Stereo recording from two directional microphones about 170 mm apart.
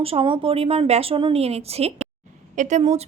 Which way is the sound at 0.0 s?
35° right (ahead or behind).